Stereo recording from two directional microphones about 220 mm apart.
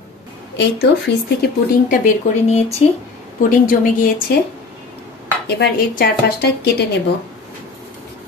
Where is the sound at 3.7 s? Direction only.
40° left (ahead or behind).